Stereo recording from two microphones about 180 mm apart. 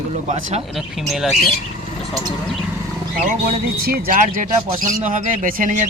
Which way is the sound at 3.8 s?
50° right (ahead or behind).